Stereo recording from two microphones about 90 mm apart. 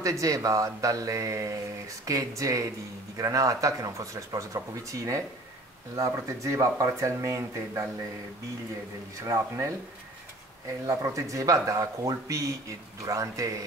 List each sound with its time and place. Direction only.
0.0 s speech: 35° right (ahead or behind)
9.2 s speech: 35° right (ahead or behind)
10.9 s speech: 35° right (ahead or behind)